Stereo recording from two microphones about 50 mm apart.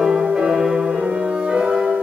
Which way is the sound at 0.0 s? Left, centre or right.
Centre.